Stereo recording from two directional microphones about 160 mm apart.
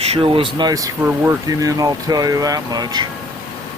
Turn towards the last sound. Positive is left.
turn(degrees=-25)  # may be behind; listen again after turning